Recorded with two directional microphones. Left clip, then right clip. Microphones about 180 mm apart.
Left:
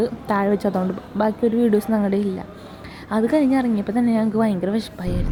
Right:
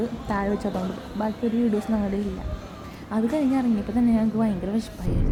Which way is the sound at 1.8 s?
25° left (ahead or behind).